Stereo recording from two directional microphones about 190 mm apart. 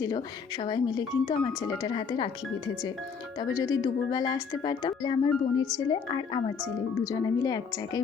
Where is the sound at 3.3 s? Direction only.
20° left (ahead or behind).